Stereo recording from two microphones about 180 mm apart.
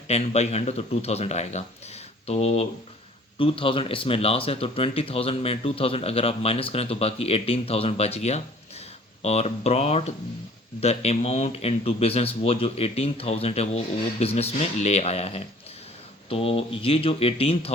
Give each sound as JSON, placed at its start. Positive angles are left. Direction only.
{"t": 0.1, "sound": "speech", "side_deg": 35}